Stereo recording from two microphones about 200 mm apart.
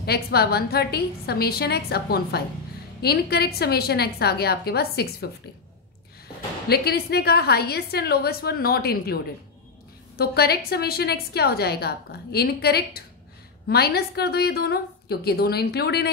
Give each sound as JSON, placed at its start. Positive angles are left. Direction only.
{"t": 0.0, "sound": "a woman's voice", "side_deg": 50}
{"t": 6.7, "sound": "a woman's voice", "side_deg": 50}